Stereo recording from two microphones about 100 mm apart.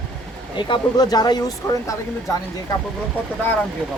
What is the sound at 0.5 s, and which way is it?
Speech, 45° left (ahead or behind).